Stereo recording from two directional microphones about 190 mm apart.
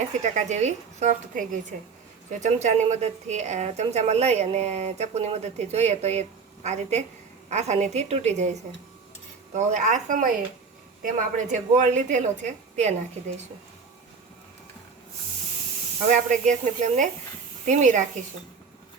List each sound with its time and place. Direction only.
0.2 s a woman's voice: 40° right (ahead or behind)
9.6 s a woman's voice: 40° right (ahead or behind)
16.0 s a woman's voice: 40° right (ahead or behind)